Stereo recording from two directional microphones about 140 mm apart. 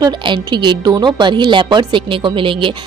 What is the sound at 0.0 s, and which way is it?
Speech, 35° right (ahead or behind).